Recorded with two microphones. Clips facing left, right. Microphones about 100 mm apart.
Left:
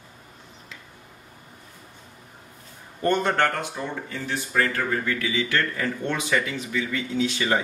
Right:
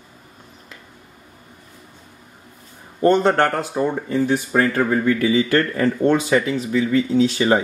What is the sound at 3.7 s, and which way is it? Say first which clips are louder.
Speech: right 11 dB; 35° right (ahead or behind).